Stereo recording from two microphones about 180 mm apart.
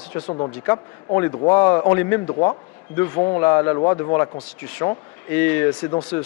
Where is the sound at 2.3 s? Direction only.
25° left (ahead or behind).